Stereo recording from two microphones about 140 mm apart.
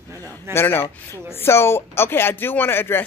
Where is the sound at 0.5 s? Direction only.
15° left (ahead or behind).